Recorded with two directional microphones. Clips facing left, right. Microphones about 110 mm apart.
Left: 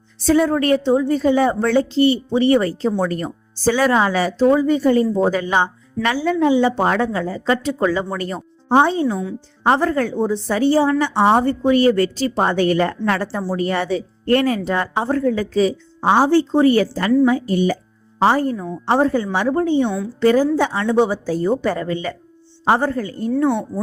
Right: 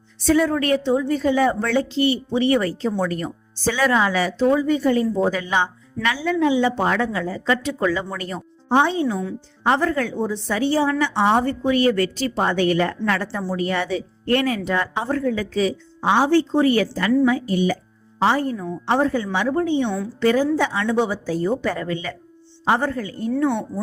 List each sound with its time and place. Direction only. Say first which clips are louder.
0.3 s speech: left 3 dB; 35° left (ahead or behind)
23.5 s speech: left 3 dB; 10° left (ahead or behind)